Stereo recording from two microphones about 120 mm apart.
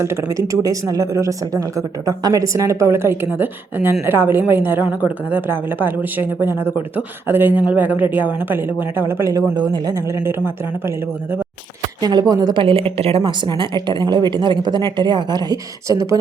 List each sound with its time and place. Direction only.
0.0 s a woman's voice: 20° right (ahead or behind)
11.9 s speech: 40° right (ahead or behind)
12.5 s a woman's voice: 50° right (ahead or behind); by 16.2 s 25° right (ahead or behind)